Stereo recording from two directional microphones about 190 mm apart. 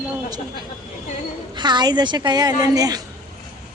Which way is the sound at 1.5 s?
25° right (ahead or behind).